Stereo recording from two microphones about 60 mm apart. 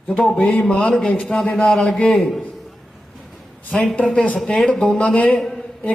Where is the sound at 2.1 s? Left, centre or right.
Centre.